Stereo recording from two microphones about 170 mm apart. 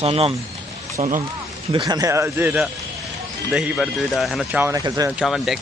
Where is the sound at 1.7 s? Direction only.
25° right (ahead or behind); by 4.6 s centre (ahead or behind).